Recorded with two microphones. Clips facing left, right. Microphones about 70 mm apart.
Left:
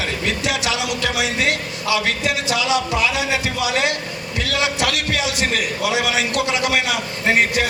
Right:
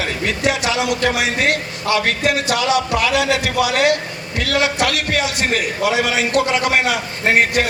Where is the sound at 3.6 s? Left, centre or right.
Right.